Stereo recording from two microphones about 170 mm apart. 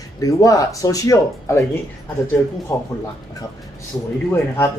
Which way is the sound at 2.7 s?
15° left (ahead or behind).